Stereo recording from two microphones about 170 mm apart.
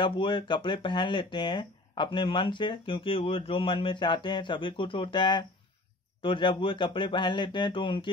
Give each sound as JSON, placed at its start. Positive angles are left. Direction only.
{"t": 0.0, "sound": "speech", "side_deg": 30}